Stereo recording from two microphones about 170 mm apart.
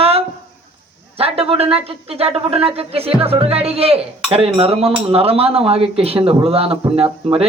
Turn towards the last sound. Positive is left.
turn(degrees=-35)  # may be behind; listen again after turning